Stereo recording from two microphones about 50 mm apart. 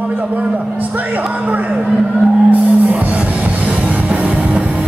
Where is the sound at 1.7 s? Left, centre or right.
Right.